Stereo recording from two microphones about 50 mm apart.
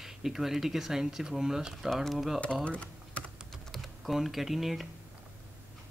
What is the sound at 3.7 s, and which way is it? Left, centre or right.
Speech, centre.